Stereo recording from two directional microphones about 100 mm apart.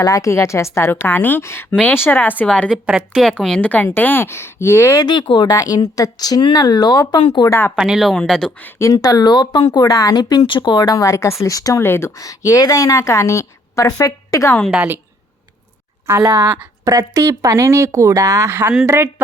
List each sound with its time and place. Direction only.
0.0 s a woman's voice: 35° left (ahead or behind); by 2.6 s 15° left (ahead or behind)
2.6 s a woman's voice: 10° right (ahead or behind)
3.2 s a woman's voice: 5° left (ahead or behind); by 5.0 s 30° left (ahead or behind)
5.2 s a woman's voice: 50° left (ahead or behind)
7.8 s speech: 5° right (ahead or behind)
8.8 s a woman's voice: 40° left (ahead or behind)
16.0 s speech: 25° right (ahead or behind)
16.8 s speech: 35° right (ahead or behind)